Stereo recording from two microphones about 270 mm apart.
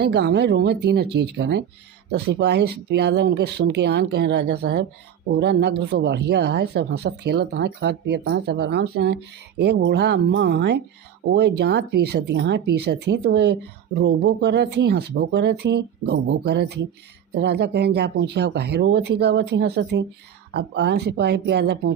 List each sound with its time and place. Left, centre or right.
0.0 s speech: right